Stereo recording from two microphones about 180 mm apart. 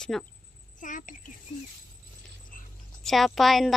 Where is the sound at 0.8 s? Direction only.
45° left (ahead or behind).